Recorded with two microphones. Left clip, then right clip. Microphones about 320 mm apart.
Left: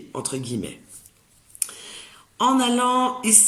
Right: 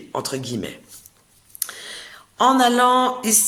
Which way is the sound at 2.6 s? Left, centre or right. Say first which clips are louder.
Right 5 dB; centre.